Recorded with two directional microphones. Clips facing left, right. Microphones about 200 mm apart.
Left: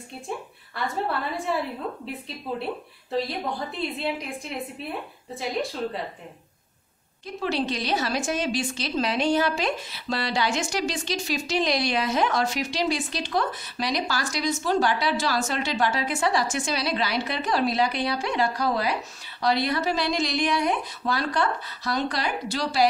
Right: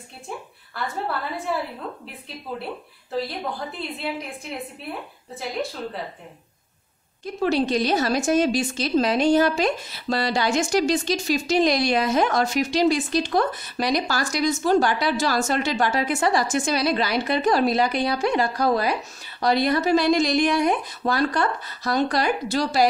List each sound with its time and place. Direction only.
0.7 s a woman's voice: centre (ahead or behind)
2.6 s a woman's voice: centre (ahead or behind)
5.3 s a woman's voice: centre (ahead or behind)
7.4 s a woman's voice: 45° right (ahead or behind)